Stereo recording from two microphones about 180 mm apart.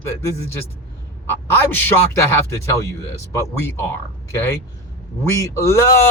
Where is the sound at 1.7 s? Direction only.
10° left (ahead or behind).